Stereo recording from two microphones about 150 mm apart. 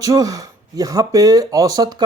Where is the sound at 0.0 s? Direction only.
25° right (ahead or behind).